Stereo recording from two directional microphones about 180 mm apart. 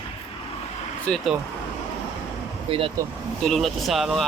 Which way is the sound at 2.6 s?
30° right (ahead or behind).